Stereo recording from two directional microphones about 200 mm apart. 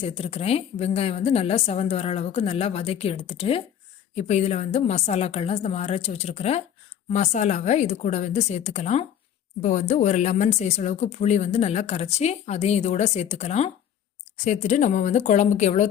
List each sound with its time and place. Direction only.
0.1 s a woman's voice: 30° left (ahead or behind)